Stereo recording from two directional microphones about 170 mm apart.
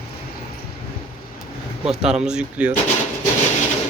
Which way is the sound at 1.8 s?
5° right (ahead or behind).